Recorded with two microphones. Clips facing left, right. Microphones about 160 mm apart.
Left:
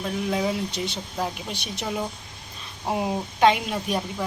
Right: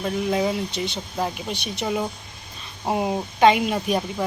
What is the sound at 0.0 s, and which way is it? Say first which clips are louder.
Speech: right 3 dB; centre (ahead or behind).